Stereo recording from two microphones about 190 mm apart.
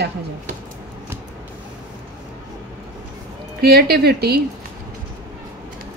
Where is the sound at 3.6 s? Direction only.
55° right (ahead or behind).